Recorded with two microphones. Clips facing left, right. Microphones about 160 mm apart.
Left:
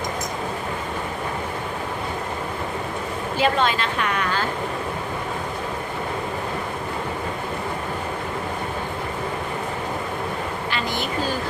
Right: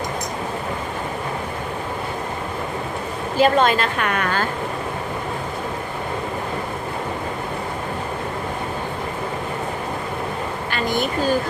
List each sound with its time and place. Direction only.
3.3 s a woman's voice: 45° right (ahead or behind)
10.7 s vehicle: 50° right (ahead or behind)